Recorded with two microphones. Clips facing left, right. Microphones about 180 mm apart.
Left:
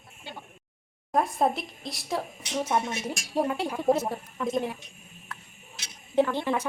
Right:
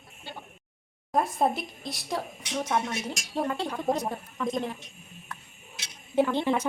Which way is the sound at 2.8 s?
20° left (ahead or behind).